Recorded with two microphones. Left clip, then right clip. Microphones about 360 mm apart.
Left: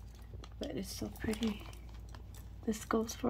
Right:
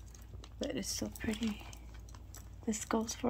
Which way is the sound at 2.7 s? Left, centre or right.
Centre.